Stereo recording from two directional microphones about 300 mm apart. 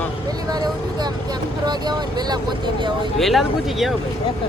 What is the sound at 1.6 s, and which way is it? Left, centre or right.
Speech, centre.